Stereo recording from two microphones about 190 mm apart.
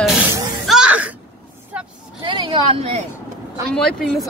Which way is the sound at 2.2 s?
25° right (ahead or behind).